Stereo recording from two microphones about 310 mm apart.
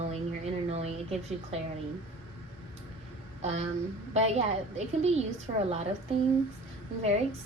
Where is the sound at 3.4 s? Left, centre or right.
Right.